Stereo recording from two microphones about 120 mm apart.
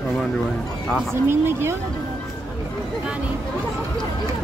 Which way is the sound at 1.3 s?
20° right (ahead or behind).